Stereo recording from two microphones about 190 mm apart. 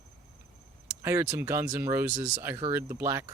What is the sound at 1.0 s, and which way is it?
Speech, 15° right (ahead or behind).